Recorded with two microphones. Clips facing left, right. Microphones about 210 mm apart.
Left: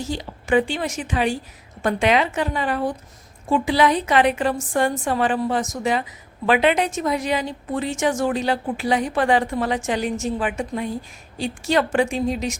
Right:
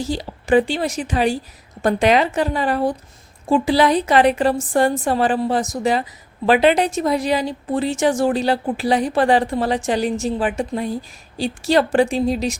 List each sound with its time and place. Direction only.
0.0 s a woman's voice: 35° right (ahead or behind)